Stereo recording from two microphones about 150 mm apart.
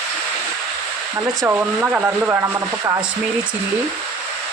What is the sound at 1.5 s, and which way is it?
Speech, 15° right (ahead or behind).